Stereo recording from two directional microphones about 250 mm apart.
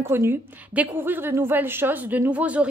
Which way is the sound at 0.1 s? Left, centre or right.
Centre.